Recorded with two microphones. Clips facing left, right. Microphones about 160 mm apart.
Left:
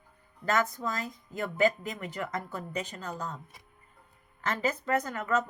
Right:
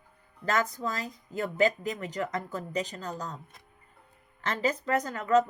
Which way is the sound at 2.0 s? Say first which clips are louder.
Even; 40° right (ahead or behind).